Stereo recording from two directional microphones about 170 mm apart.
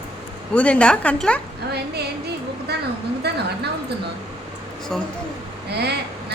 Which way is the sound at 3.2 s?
75° right (ahead or behind).